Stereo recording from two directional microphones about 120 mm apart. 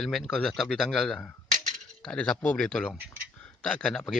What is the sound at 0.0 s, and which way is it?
Speech, 5° left (ahead or behind).